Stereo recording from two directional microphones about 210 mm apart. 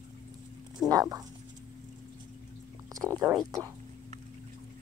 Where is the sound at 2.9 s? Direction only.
15° right (ahead or behind).